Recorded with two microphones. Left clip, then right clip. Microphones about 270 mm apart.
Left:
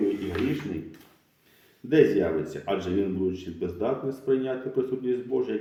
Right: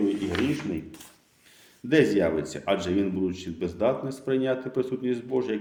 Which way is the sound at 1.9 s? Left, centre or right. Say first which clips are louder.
Left 1 dB; right.